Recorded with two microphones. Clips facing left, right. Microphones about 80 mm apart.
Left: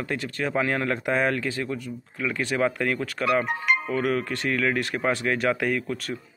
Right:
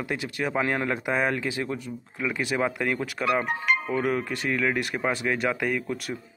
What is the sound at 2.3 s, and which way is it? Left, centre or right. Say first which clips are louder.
Speech: left 2 dB; centre.